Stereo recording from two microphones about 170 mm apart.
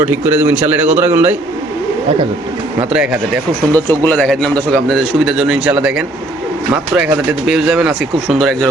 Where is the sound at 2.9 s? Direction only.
5° right (ahead or behind).